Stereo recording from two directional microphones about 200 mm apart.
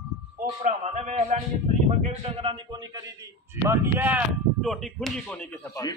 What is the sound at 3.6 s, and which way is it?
Speech, 10° right (ahead or behind).